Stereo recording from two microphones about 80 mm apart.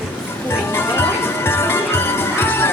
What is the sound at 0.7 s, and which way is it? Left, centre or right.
Music, left.